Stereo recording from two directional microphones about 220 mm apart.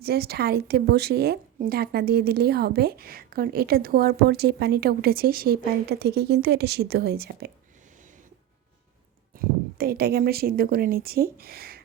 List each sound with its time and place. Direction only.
0.0 s a woman's voice: 45° right (ahead or behind)
9.3 s a woman's voice: 40° right (ahead or behind)